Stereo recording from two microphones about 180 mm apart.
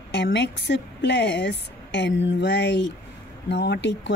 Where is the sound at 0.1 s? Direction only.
75° left (ahead or behind).